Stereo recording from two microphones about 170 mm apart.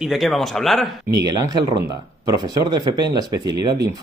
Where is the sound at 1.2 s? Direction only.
20° right (ahead or behind).